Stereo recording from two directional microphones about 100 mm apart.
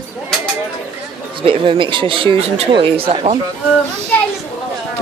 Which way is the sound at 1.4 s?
60° right (ahead or behind).